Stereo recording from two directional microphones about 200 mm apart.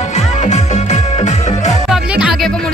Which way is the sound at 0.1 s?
35° left (ahead or behind).